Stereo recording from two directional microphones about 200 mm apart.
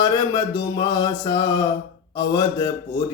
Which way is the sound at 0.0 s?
20° left (ahead or behind).